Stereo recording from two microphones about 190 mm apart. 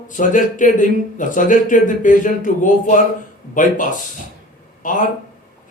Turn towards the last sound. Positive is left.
turn(degrees=45)  # may be behind; listen again after turning